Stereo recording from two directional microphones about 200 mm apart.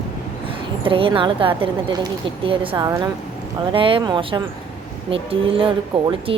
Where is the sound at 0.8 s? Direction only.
25° right (ahead or behind).